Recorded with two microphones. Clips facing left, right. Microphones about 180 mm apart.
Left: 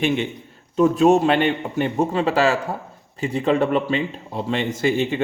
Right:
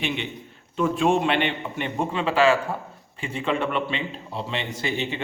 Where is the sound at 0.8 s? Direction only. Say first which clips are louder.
Left 6 dB; 40° left (ahead or behind).